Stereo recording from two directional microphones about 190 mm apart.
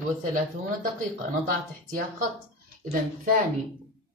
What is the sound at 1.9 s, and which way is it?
Speech, 45° right (ahead or behind).